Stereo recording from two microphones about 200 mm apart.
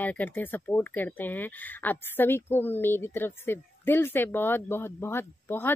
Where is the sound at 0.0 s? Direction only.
10° left (ahead or behind).